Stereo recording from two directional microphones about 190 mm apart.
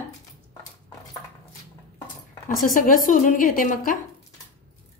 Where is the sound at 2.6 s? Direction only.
45° left (ahead or behind).